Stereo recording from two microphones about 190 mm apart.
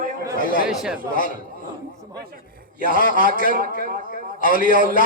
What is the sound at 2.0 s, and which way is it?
Speech, 20° right (ahead or behind).